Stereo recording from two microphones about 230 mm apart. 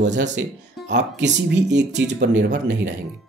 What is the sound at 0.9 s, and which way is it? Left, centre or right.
Speech, right.